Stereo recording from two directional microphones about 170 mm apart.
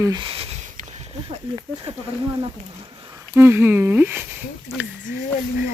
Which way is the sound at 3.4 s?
15° right (ahead or behind).